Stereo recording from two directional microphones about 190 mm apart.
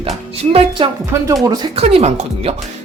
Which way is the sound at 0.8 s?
25° right (ahead or behind).